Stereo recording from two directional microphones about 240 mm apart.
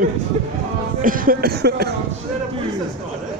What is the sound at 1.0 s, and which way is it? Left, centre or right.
Speech, right.